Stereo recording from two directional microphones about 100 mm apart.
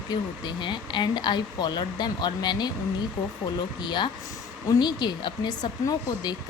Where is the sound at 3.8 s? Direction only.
50° left (ahead or behind).